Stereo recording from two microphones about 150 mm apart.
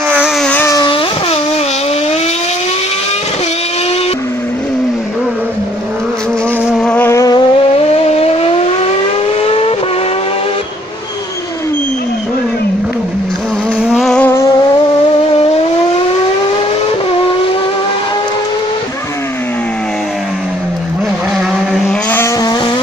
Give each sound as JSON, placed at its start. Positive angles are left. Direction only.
{"t": 0.4, "sound": "a sound", "side_deg": 10}
{"t": 0.7, "sound": "vehicle", "side_deg": 30}
{"t": 6.8, "sound": "vehicle", "side_deg": 5}
{"t": 7.1, "sound": "vehicle", "side_deg": 25}
{"t": 8.2, "sound": "vehicle", "side_deg": 40}
{"t": 13.9, "sound": "music", "side_deg": 5}
{"t": 22.1, "sound": "vehicle", "side_deg": 15}